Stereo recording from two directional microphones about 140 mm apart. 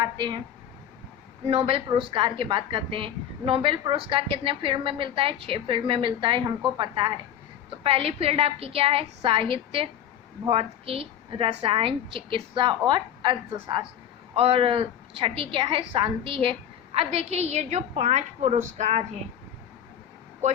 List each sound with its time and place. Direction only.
0.0 s a woman's voice: 30° right (ahead or behind)
1.5 s a woman's voice: 45° right (ahead or behind)